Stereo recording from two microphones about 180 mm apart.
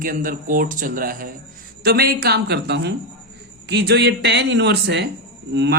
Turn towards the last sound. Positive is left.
turn(degrees=-75)  # may be behind; listen again after turning